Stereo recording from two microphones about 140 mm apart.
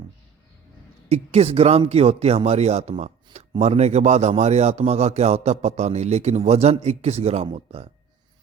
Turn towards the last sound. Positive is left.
turn(degrees=-50)  # may be behind; listen again after turning